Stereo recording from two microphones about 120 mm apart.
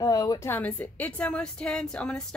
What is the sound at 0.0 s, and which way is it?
Speech, 30° left (ahead or behind).